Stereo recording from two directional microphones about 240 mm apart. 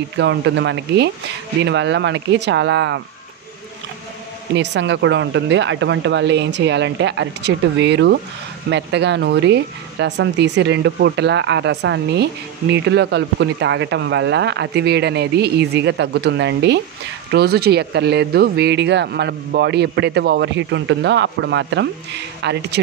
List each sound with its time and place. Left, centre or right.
0.2 s speech: right
4.6 s speech: right